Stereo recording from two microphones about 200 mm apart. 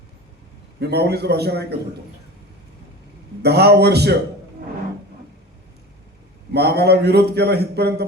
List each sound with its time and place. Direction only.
0.8 s a man's voice: 55° right (ahead or behind)
3.4 s a man's voice: 55° right (ahead or behind)
6.5 s a man's voice: 55° right (ahead or behind)